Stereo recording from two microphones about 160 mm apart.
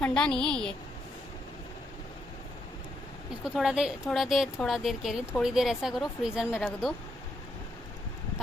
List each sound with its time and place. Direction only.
0.0 s a woman's voice: 5° left (ahead or behind)
3.4 s a woman's voice: 5° right (ahead or behind)